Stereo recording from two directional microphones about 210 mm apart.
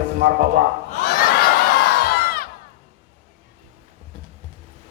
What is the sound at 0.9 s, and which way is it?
Crowd, 50° left (ahead or behind).